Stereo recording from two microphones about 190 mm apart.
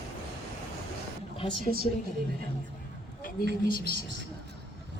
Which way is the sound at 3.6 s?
50° left (ahead or behind).